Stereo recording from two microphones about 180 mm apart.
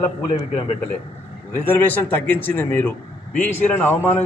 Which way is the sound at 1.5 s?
10° left (ahead or behind).